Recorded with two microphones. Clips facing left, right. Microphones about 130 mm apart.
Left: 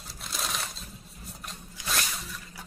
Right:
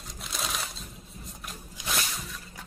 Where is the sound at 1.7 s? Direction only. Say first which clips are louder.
Even; 15° right (ahead or behind).